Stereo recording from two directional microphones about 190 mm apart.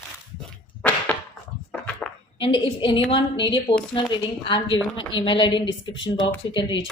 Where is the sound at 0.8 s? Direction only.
10° left (ahead or behind).